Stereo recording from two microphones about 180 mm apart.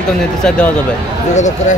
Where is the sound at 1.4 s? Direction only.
40° left (ahead or behind).